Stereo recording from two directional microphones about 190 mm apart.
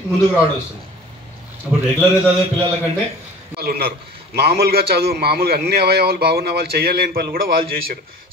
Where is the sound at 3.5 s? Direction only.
55° right (ahead or behind).